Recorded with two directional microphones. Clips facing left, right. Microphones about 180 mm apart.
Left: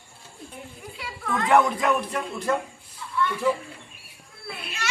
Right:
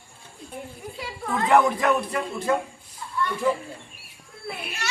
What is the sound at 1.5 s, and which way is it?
Speech, centre (ahead or behind).